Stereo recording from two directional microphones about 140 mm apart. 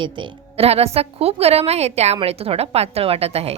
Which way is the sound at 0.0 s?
40° right (ahead or behind).